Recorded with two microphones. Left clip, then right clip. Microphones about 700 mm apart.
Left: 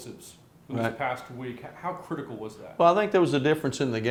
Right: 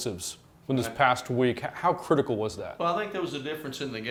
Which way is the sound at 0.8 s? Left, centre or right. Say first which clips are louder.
Right 5 dB; right.